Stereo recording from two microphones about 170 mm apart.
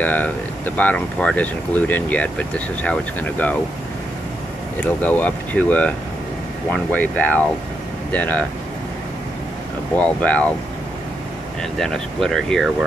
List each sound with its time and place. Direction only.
0.0 s speech: 10° left (ahead or behind)
4.7 s speech: 10° left (ahead or behind)
9.9 s speech: 10° left (ahead or behind)
11.8 s speech: centre (ahead or behind)